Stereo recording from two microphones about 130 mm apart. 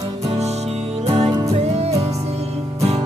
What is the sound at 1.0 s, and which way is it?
Music, 50° right (ahead or behind).